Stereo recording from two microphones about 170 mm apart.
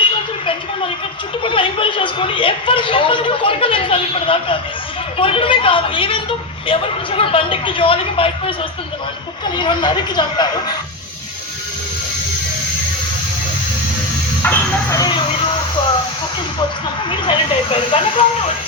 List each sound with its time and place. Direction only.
1.5 s a man's voice: 30° left (ahead or behind)
9.6 s speech: 25° left (ahead or behind)
14.4 s a sound: 15° left (ahead or behind)
17.1 s speech: 30° left (ahead or behind)